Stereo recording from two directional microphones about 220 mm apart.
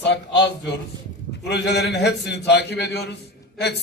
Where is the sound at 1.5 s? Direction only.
50° left (ahead or behind).